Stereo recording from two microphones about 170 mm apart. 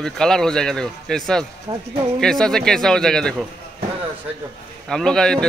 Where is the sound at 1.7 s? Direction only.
30° right (ahead or behind).